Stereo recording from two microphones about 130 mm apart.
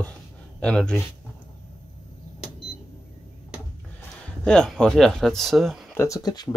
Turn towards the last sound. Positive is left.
turn(degrees=30)  # may be behind; listen again after turning